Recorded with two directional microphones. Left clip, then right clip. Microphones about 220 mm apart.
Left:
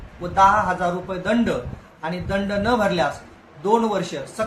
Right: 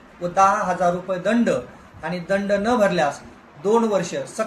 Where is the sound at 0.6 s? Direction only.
15° left (ahead or behind).